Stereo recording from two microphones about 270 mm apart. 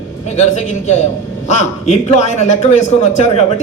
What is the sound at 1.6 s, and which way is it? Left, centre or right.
A man's voice, left.